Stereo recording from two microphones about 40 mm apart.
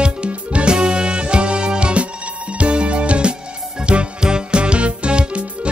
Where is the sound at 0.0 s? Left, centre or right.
Right.